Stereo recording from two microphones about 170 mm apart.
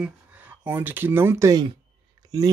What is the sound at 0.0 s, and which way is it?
Speech, 10° right (ahead or behind).